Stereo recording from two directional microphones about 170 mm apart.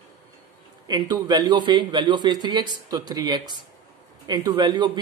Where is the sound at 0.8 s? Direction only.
25° right (ahead or behind).